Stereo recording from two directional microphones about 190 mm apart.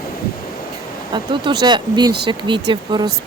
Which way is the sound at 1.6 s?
20° right (ahead or behind).